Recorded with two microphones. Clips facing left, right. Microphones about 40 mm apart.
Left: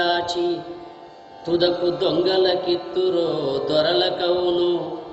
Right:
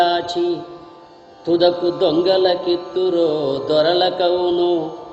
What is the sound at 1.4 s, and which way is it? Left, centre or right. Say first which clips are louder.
Music: right 4 dB; centre.